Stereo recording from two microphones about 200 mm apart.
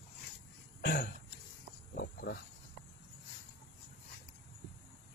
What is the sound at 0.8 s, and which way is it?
Speech, 55° left (ahead or behind).